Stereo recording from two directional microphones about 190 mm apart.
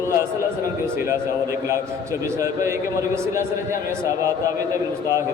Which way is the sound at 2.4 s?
15° right (ahead or behind).